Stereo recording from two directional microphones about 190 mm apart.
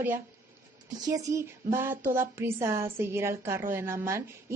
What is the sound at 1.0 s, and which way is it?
A woman's voice, 20° right (ahead or behind).